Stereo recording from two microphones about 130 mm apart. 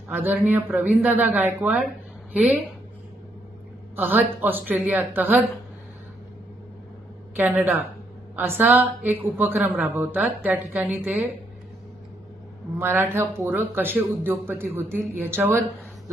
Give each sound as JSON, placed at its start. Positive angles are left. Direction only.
{"t": 0.1, "sound": "speech", "side_deg": -15}
{"t": 3.9, "sound": "speech", "side_deg": -15}
{"t": 7.3, "sound": "speech", "side_deg": -15}
{"t": 12.8, "sound": "speech", "side_deg": -20}